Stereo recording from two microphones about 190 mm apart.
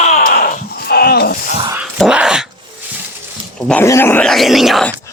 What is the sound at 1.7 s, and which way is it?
Dog, 5° right (ahead or behind).